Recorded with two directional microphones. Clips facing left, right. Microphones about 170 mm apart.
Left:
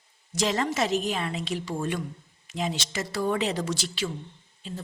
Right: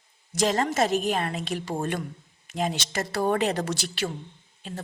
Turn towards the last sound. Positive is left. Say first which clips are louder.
# even
turn(degrees=-60)  # may be behind; listen again after turning